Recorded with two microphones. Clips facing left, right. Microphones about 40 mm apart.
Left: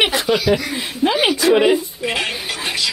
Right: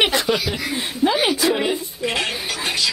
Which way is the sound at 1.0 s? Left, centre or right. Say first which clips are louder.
Left 3 dB; left.